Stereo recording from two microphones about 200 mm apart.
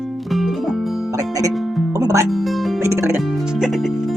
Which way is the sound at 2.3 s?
Centre (ahead or behind).